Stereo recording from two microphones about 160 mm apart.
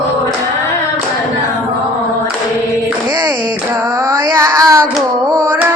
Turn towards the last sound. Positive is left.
turn(degrees=-20)  # may be behind; listen again after turning